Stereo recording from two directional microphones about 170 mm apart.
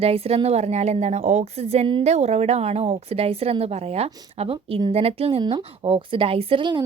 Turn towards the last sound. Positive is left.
turn(degrees=-25)  # may be behind; listen again after turning